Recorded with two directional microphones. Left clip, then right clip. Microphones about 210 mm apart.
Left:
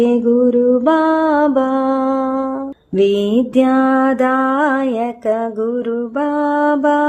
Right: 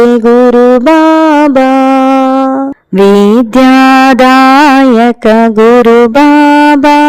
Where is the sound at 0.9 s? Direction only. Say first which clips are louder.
Right 9 dB; 40° right (ahead or behind).